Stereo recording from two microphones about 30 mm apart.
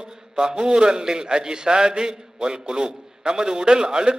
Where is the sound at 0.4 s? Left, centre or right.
Right.